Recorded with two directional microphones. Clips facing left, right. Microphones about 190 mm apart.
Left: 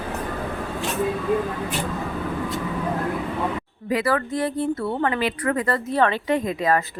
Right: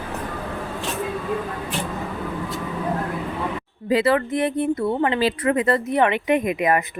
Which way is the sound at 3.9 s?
25° right (ahead or behind).